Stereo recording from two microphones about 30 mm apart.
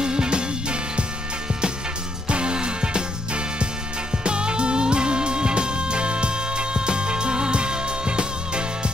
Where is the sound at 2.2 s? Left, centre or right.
Right.